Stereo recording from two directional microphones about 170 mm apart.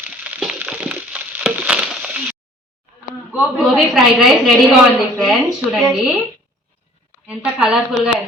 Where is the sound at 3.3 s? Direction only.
Centre (ahead or behind).